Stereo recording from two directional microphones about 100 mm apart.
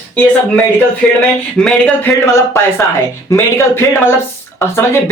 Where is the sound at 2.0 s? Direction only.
25° left (ahead or behind).